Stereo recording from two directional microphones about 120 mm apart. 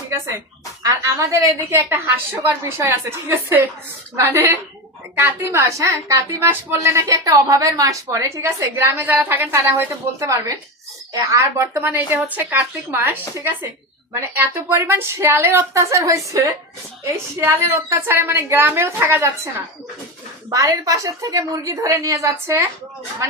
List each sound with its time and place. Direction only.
0.1 s a woman's voice: 25° right (ahead or behind)